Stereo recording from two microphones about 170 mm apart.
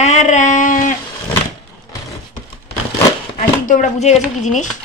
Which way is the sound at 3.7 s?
45° left (ahead or behind).